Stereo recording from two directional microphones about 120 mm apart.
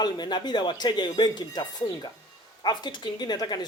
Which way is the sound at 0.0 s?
35° left (ahead or behind).